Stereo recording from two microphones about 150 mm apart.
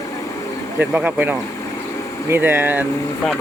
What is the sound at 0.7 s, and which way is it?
Speech, 10° right (ahead or behind).